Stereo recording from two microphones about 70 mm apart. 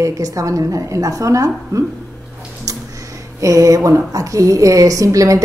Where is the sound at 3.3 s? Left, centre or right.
Right.